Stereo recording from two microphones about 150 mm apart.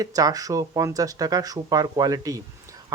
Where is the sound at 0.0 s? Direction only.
25° right (ahead or behind).